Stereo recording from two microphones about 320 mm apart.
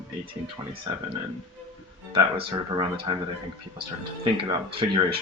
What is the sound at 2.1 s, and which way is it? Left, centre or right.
Speech, centre.